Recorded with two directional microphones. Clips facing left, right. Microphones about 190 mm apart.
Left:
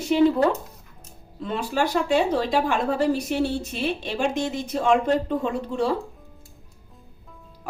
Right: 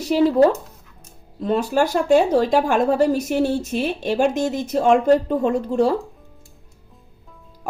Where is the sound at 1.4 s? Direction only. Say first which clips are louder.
Right 6 dB; 40° right (ahead or behind).